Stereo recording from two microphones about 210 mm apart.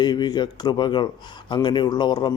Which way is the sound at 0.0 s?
20° left (ahead or behind).